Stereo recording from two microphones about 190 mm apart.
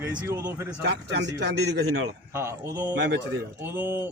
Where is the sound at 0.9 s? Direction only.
65° right (ahead or behind).